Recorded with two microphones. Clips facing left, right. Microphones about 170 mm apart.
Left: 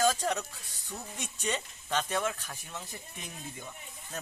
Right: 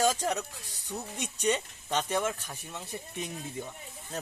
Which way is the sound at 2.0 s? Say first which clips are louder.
Right 2 dB; 20° right (ahead or behind).